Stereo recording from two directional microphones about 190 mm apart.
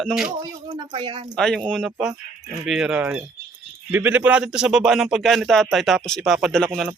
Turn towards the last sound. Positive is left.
turn(degrees=0)  # may be behind; listen again after turning